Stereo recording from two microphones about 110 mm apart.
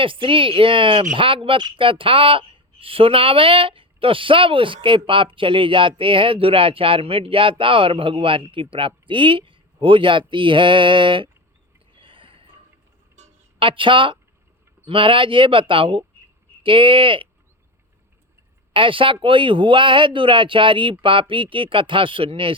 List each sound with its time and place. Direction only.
0.0 s speech: 55° right (ahead or behind)
11.9 s a sound: 50° right (ahead or behind)
13.6 s speech: 50° right (ahead or behind)
18.7 s speech: 50° right (ahead or behind)